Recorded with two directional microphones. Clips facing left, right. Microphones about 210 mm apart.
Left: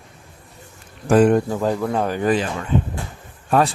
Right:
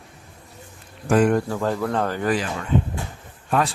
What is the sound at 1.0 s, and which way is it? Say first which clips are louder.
Speech: left 4 dB; 35° left (ahead or behind).